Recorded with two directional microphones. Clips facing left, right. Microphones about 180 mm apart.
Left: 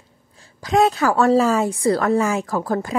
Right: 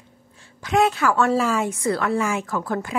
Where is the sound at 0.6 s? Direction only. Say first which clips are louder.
Left 2 dB; 35° left (ahead or behind).